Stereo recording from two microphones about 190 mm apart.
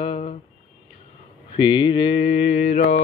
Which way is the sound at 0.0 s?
35° left (ahead or behind).